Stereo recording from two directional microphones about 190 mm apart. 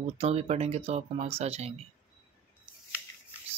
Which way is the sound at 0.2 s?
35° right (ahead or behind).